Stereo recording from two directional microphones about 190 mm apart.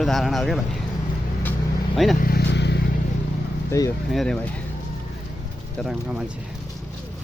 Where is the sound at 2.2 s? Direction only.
55° left (ahead or behind).